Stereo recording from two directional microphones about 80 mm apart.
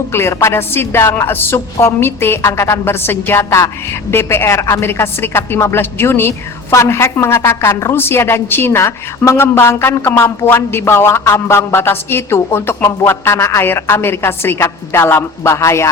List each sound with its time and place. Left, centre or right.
0.1 s a woman's voice: left